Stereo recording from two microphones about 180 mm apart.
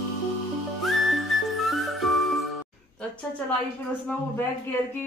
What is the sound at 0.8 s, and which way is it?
Music, centre (ahead or behind).